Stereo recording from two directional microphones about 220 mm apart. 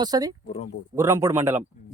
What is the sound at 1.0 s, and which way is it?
Speech, 15° right (ahead or behind).